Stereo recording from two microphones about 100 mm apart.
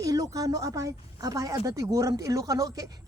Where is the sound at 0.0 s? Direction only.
35° right (ahead or behind).